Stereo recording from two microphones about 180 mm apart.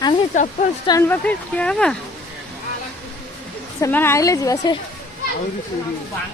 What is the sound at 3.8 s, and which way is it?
Speech, 15° left (ahead or behind).